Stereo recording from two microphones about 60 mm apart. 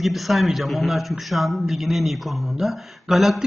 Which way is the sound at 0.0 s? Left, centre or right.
Centre.